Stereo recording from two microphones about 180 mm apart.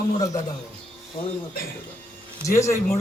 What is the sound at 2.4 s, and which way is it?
Speech, 15° left (ahead or behind).